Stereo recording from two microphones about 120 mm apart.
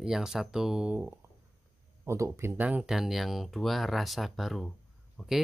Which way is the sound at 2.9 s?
Centre (ahead or behind).